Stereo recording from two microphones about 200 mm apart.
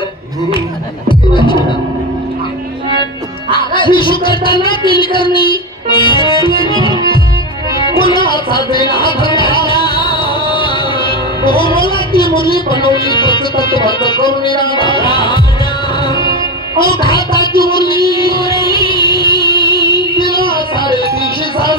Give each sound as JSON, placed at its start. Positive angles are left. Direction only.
{"t": 1.0, "sound": "music", "side_deg": 25}
{"t": 3.5, "sound": "music", "side_deg": 25}
{"t": 5.9, "sound": "accordion", "side_deg": 25}
{"t": 7.8, "sound": "music", "side_deg": 25}
{"t": 17.6, "sound": "a sound", "side_deg": 50}
{"t": 18.4, "sound": "music", "side_deg": 25}